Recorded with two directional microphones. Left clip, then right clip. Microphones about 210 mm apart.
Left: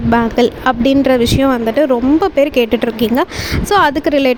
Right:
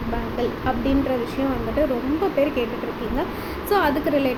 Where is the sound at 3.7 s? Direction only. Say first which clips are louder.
Left 8 dB; 45° left (ahead or behind).